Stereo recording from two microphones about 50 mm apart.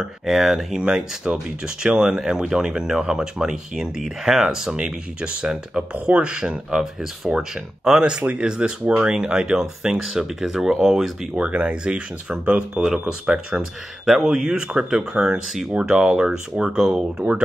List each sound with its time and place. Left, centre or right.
0.0 s speech: centre
4.7 s speech: right
8.2 s speech: right
11.3 s speech: right